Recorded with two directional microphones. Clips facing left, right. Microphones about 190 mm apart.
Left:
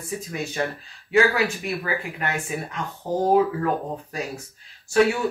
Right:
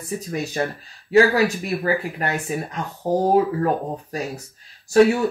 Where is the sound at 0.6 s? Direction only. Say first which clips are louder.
Right 2 dB; 40° right (ahead or behind).